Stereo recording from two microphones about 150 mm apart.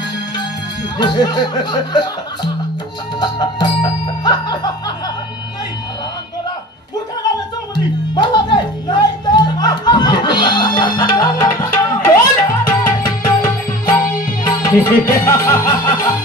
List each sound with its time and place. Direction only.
0.9 s speech: 25° left (ahead or behind)
3.2 s music: 25° left (ahead or behind)
7.7 s music: 30° left (ahead or behind)